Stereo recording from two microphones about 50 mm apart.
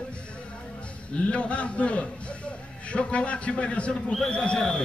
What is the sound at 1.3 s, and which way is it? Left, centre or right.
Speech, left.